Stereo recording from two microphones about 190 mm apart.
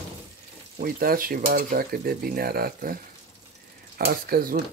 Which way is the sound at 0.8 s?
50° right (ahead or behind).